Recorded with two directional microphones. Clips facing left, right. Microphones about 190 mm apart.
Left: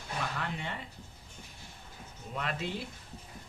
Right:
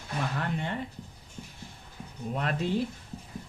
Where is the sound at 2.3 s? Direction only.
45° right (ahead or behind).